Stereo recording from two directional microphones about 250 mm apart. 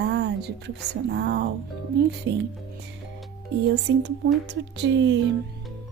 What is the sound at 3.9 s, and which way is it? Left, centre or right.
A woman's voice, right.